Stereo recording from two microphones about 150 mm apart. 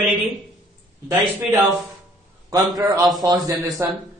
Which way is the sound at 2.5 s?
25° right (ahead or behind).